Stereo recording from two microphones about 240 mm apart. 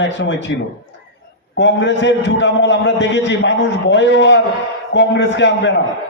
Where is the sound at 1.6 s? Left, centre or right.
Left.